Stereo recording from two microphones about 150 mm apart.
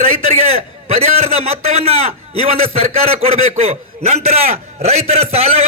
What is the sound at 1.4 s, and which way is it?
A man's voice, 40° right (ahead or behind).